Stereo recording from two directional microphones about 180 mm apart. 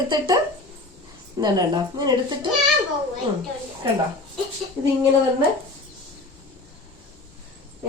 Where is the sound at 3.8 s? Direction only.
25° right (ahead or behind).